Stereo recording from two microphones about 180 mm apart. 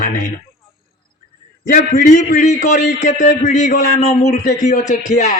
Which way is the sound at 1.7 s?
45° left (ahead or behind).